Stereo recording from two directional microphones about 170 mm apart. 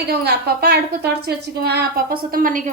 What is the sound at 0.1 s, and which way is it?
A woman's voice, 70° right (ahead or behind).